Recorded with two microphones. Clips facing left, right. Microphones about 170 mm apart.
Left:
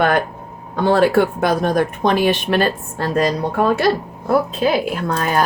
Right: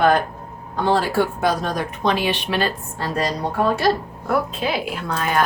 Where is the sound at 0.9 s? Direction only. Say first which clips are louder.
Left 6 dB; 60° left (ahead or behind).